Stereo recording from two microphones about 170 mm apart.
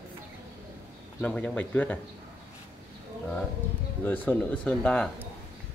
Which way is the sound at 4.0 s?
10° left (ahead or behind).